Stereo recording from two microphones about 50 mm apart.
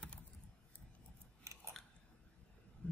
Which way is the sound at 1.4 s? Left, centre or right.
Right.